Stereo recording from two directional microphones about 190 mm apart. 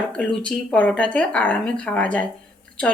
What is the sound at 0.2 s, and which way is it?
A woman's voice, 5° left (ahead or behind).